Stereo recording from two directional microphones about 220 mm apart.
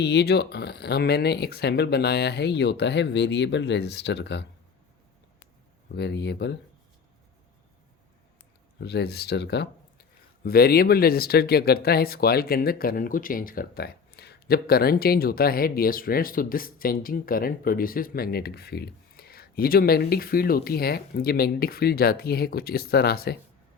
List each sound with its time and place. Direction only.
0.0 s speech: 50° left (ahead or behind)
6.0 s speech: 50° left (ahead or behind)
8.8 s speech: 50° left (ahead or behind)